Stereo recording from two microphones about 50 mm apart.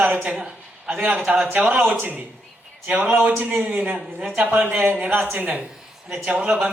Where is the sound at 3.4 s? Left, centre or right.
Right.